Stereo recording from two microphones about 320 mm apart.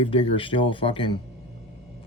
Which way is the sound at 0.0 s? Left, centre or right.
Centre.